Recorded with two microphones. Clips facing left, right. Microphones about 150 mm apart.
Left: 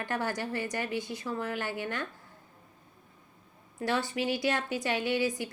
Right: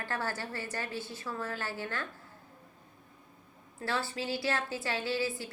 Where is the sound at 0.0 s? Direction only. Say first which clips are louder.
Left 4 dB; 15° left (ahead or behind).